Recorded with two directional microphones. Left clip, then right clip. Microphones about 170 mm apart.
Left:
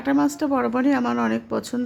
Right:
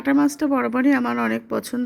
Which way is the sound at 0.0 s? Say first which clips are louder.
Right 2 dB; 20° right (ahead or behind).